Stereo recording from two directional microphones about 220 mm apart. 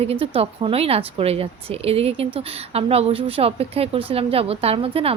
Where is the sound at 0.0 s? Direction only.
25° right (ahead or behind).